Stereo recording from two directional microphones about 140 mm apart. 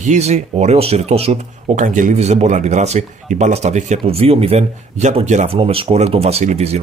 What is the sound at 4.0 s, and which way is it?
Speech, 45° right (ahead or behind).